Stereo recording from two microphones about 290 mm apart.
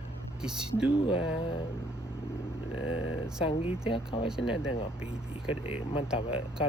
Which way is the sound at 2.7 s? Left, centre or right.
Left.